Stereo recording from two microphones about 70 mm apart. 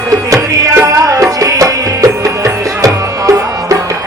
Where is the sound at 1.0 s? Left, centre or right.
Right.